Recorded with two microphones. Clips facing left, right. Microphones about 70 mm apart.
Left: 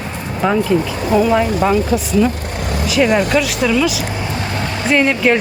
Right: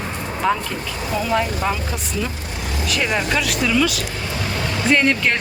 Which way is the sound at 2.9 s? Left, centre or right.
Centre.